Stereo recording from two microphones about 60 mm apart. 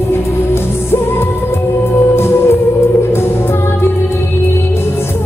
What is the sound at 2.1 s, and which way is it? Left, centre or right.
Music, left.